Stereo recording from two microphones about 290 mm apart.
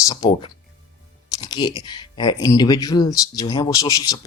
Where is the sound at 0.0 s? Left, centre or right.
Centre.